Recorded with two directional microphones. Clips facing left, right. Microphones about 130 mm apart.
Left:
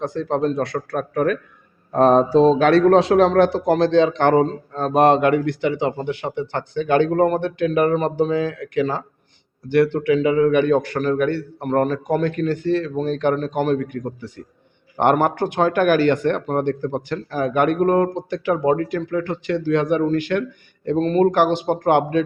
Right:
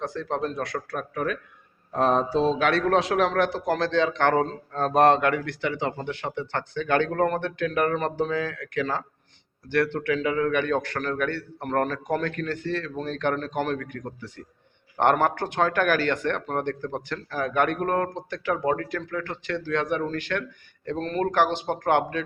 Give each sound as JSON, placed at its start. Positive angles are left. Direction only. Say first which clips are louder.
{"t": 0.0, "sound": "a man's voice", "louder": "left 7 dB", "side_deg": 25}
{"t": 0.9, "sound": "a man's voice", "louder": "left 9 dB", "side_deg": 50}
{"t": 4.4, "sound": "speech", "louder": "left 6 dB", "side_deg": 0}
{"t": 5.0, "sound": "speech", "louder": "left 7 dB", "side_deg": 20}